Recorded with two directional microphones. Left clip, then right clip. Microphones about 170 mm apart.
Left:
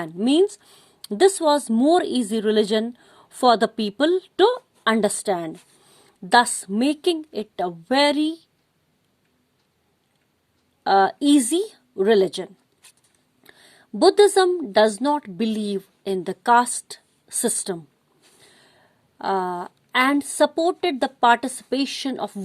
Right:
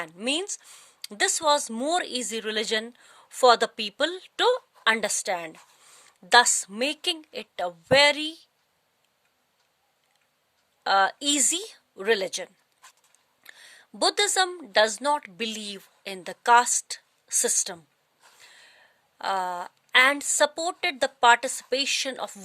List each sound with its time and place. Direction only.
0.0 s a woman's voice: 15° right (ahead or behind)
10.8 s a woman's voice: 15° right (ahead or behind)